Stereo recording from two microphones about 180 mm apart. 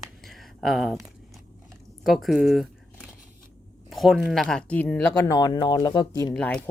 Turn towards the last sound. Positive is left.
turn(degrees=5)  # may be behind; listen again after turning